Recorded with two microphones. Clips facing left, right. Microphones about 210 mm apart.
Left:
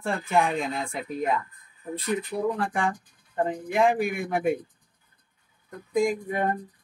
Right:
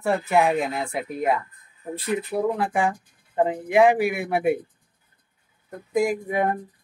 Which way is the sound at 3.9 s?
10° right (ahead or behind).